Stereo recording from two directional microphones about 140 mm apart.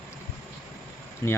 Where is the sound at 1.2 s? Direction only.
20° left (ahead or behind).